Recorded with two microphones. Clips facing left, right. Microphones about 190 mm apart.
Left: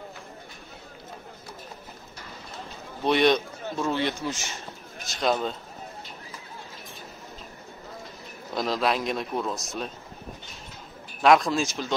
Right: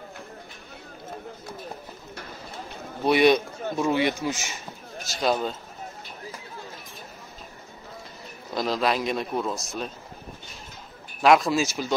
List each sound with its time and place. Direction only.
3.1 s a man's voice: 10° right (ahead or behind)
8.5 s speech: centre (ahead or behind)
11.2 s a man's voice: 5° right (ahead or behind)